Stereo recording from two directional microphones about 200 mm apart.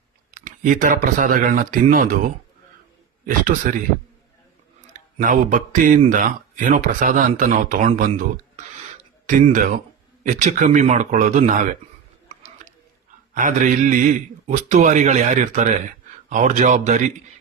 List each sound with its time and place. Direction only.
0.3 s speech: 40° right (ahead or behind)
3.2 s speech: 40° right (ahead or behind)
5.1 s speech: 40° right (ahead or behind)
13.3 s speech: 40° right (ahead or behind)